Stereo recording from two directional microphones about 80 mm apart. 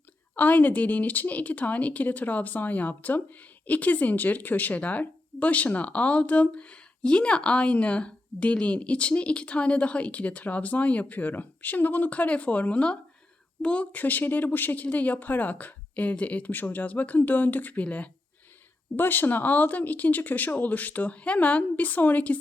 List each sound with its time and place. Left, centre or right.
0.3 s speech: left